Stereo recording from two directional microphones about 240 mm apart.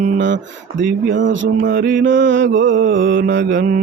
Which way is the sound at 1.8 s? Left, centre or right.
Right.